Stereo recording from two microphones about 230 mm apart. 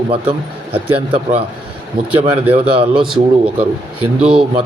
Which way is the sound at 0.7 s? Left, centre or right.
Right.